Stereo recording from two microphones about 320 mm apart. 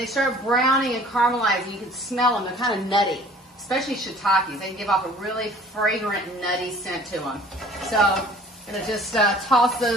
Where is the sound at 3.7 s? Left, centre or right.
Centre.